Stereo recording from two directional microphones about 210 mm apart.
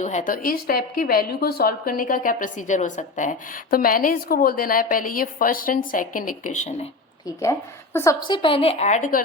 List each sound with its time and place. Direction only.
0.0 s a woman's voice: 35° left (ahead or behind)
8.3 s a woman's voice: 25° left (ahead or behind)